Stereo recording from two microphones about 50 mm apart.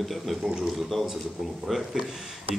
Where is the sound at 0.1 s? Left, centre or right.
Centre.